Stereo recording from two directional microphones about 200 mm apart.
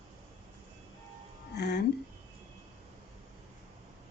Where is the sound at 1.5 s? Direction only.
55° left (ahead or behind).